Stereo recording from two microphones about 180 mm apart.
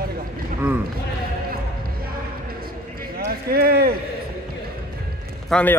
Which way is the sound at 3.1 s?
55° right (ahead or behind).